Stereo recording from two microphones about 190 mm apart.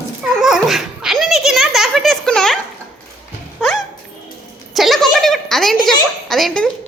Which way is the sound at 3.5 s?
Centre (ahead or behind).